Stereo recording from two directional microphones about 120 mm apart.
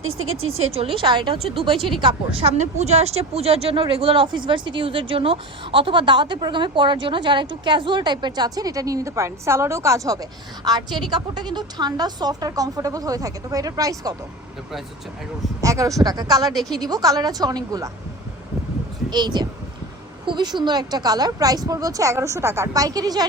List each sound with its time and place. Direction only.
0.7 s a woman's voice: 50° right (ahead or behind)
2.0 s speech: 55° right (ahead or behind); by 14.2 s 30° right (ahead or behind)
15.6 s a woman's voice: 25° right (ahead or behind)
16.6 s a woman's voice: centre (ahead or behind)
16.8 s speech: 30° right (ahead or behind)
19.1 s a woman's voice: 35° right (ahead or behind)